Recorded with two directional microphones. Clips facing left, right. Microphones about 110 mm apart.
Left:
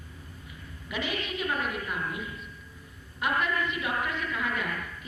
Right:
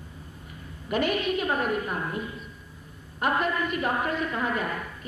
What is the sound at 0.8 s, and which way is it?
A woman's voice, 50° right (ahead or behind).